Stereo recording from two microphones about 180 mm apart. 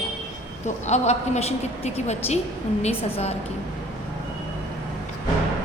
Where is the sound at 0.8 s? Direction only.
40° left (ahead or behind).